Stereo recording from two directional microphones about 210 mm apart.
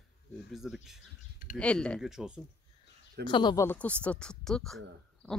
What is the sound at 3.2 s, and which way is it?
Speech, 20° left (ahead or behind).